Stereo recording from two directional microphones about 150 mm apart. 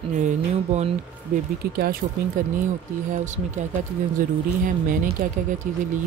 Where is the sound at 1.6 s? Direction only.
90° right.